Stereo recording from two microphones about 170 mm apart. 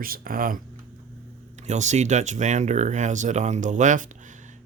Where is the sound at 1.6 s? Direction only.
45° right (ahead or behind).